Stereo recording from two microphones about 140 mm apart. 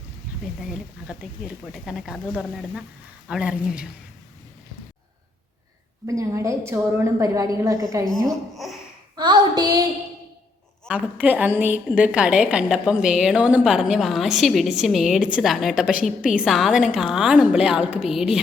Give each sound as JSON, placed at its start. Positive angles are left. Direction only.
{"t": 0.7, "sound": "a woman's voice", "side_deg": -5}
{"t": 6.1, "sound": "a woman's voice", "side_deg": -20}
{"t": 9.1, "sound": "child singing", "side_deg": -30}
{"t": 10.8, "sound": "a woman's voice", "side_deg": -10}